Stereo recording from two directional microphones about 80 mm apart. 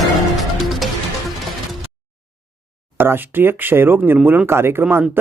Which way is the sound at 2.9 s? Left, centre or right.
Right.